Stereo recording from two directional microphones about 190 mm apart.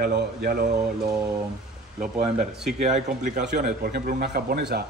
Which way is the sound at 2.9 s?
40° right (ahead or behind).